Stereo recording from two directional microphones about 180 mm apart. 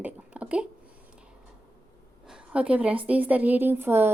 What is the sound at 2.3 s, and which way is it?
A woman's voice, 5° right (ahead or behind).